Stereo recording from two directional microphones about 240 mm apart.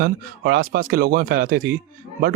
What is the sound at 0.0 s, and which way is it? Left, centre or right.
Speech, right.